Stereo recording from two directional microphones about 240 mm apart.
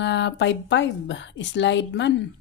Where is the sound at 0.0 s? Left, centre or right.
Left.